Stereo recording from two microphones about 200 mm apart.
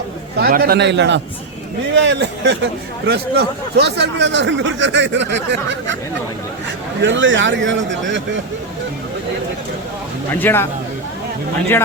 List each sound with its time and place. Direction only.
0.3 s speech: 50° right (ahead or behind)
7.0 s speech: 70° right (ahead or behind)
10.3 s speech: 10° left (ahead or behind)